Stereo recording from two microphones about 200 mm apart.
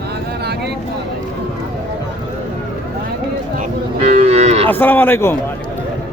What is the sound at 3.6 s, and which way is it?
Cattle, 40° right (ahead or behind).